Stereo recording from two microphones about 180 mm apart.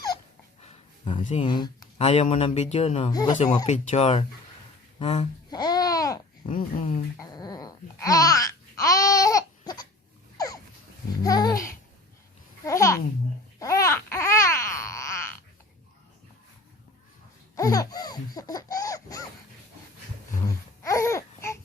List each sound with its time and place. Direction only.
0.6 s a sound: 30° left (ahead or behind)
1.2 s speech: 40° left (ahead or behind)
1.5 s speech: 25° left (ahead or behind)
2.0 s speech: 35° left (ahead or behind)
3.1 s babbling: 20° left (ahead or behind)
3.7 s speech: 40° left (ahead or behind)
5.5 s babbling: 20° left (ahead or behind)
6.5 s speech: 45° left (ahead or behind)
7.2 s babbling: 20° left (ahead or behind)
10.3 s a sound: 20° left (ahead or behind)
11.2 s babbling: 20° left (ahead or behind)
17.5 s laughter: 20° left (ahead or behind)
20.8 s a sound: 15° left (ahead or behind)